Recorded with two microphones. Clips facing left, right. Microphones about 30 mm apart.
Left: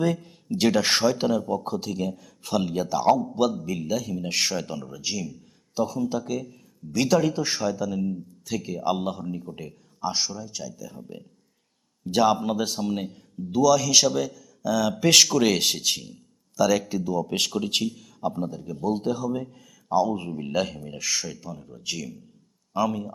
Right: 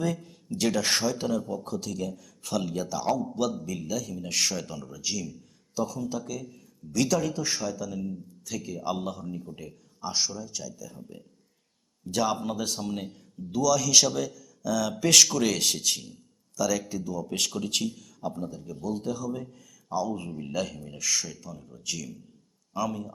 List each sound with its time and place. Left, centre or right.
0.0 s a man's voice: left
12.0 s a man's voice: left
16.6 s a man's voice: left
17.8 s a man's voice: centre
18.2 s a man's voice: left